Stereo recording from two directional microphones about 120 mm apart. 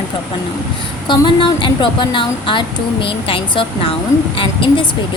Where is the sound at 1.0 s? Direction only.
40° left (ahead or behind).